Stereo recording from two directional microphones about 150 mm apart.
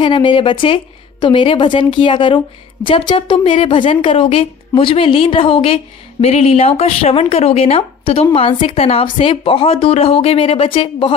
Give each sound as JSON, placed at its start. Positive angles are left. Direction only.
{"t": 0.0, "sound": "speech", "side_deg": 35}